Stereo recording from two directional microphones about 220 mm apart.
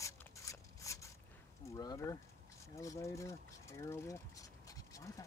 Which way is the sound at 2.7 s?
15° left (ahead or behind).